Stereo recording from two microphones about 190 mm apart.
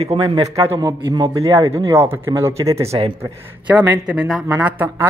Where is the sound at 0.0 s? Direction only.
30° right (ahead or behind).